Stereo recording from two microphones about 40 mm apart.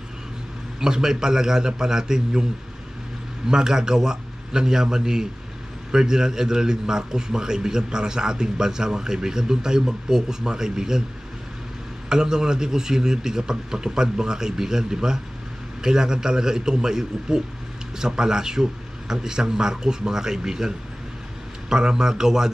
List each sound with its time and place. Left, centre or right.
0.7 s a man's voice: centre
3.4 s a man's voice: centre
12.1 s a man's voice: centre